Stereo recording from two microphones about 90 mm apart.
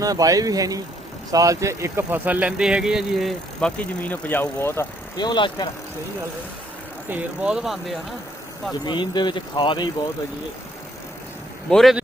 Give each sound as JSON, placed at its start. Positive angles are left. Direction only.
{"t": 0.0, "sound": "speech", "side_deg": -40}
{"t": 2.0, "sound": "speech", "side_deg": -15}
{"t": 3.6, "sound": "speech", "side_deg": 10}
{"t": 4.1, "sound": "speech", "side_deg": 20}
{"t": 5.1, "sound": "speech", "side_deg": 55}
{"t": 7.1, "sound": "speech", "side_deg": -10}
{"t": 8.8, "sound": "speech", "side_deg": 55}
{"t": 11.7, "sound": "speech", "side_deg": 0}